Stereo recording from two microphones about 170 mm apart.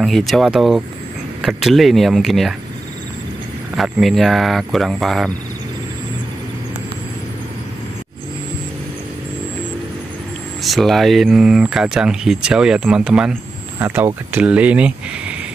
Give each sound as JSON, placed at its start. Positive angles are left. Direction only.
{"t": 0.0, "sound": "speech", "side_deg": 0}
{"t": 3.7, "sound": "speech", "side_deg": 0}
{"t": 10.6, "sound": "speech", "side_deg": 0}